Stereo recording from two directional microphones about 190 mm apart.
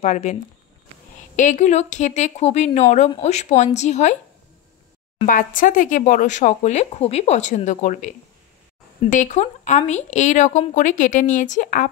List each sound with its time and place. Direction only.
0.0 s speech: 40° left (ahead or behind)
5.2 s speech: 45° left (ahead or behind)
9.1 s speech: 40° left (ahead or behind)